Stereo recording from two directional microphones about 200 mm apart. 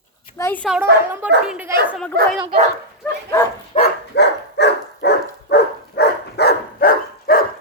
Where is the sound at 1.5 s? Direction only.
10° right (ahead or behind).